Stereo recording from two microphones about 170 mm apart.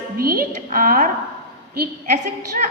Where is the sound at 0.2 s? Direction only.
60° right (ahead or behind).